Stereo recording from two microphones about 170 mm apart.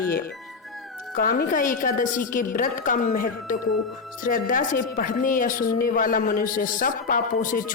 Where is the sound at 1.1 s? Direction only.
55° left (ahead or behind).